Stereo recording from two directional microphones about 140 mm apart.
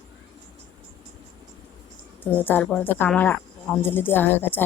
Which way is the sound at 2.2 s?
15° left (ahead or behind).